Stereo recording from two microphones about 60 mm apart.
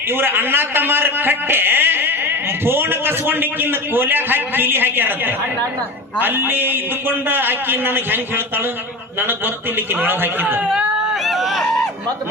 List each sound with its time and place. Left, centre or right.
0.1 s a man's voice: right
11.1 s run: centre